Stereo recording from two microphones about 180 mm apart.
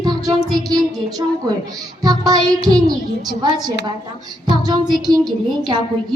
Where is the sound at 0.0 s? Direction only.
20° right (ahead or behind).